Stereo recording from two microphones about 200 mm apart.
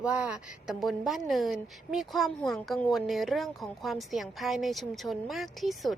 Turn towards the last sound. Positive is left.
turn(degrees=0)  # may be behind; listen again after turning